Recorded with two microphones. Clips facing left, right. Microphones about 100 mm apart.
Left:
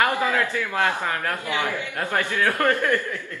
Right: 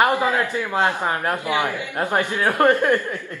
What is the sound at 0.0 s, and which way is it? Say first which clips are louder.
Speech: right 3 dB; 20° right (ahead or behind).